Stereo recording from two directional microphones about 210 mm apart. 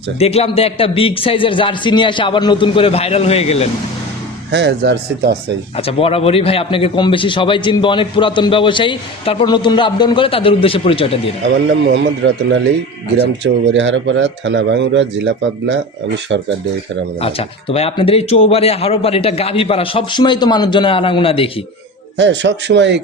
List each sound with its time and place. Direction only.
0.2 s a man's voice: 30° left (ahead or behind)
4.5 s a man's voice: 55° right (ahead or behind)
5.7 s a man's voice: 30° left (ahead or behind)
11.9 s a man's voice: 65° right (ahead or behind)
17.2 s a man's voice: 25° left (ahead or behind)
22.2 s a man's voice: 55° right (ahead or behind)